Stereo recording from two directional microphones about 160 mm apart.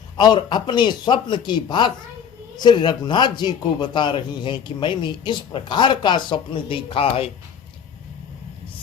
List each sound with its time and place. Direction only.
0.2 s a man's voice: 30° left (ahead or behind)